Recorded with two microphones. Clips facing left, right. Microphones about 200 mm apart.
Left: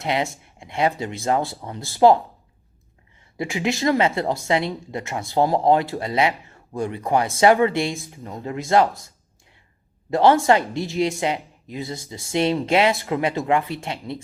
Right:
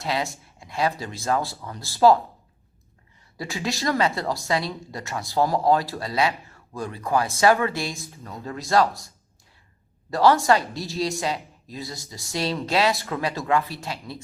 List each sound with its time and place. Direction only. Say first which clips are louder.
0.0 s speech: left 3 dB; 20° left (ahead or behind)
1.8 s speech: left 2 dB; 15° left (ahead or behind)
3.3 s speech: left 5 dB; 20° left (ahead or behind)
10.1 s speech: left 2 dB; 20° left (ahead or behind)